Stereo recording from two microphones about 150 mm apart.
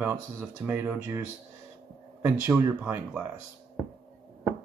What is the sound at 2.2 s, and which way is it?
Speech, 10° right (ahead or behind).